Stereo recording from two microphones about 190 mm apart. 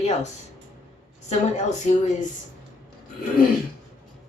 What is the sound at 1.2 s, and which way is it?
Speech, 35° left (ahead or behind).